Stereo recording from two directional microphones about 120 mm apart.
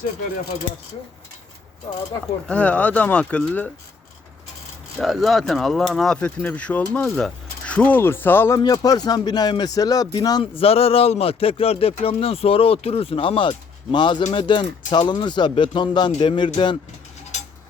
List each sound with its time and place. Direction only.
2.5 s speech: 10° left (ahead or behind)
4.9 s speech: centre (ahead or behind); by 8.5 s 20° left (ahead or behind)
8.5 s speech: 30° left (ahead or behind)
10.4 s speech: 50° left (ahead or behind)